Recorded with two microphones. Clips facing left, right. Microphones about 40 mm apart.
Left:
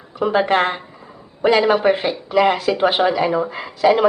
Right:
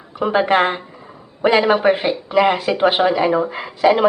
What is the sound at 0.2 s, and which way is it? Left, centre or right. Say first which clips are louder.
A woman's voice: right 1 dB; centre.